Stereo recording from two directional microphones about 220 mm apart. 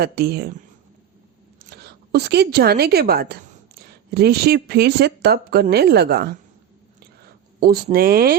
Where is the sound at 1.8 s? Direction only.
50° right (ahead or behind).